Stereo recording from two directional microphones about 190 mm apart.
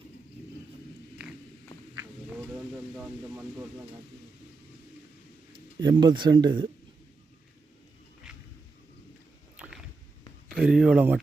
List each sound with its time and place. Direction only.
5.5 s speech: 25° right (ahead or behind)
9.6 s a sound: 5° right (ahead or behind)
10.5 s speech: 5° right (ahead or behind)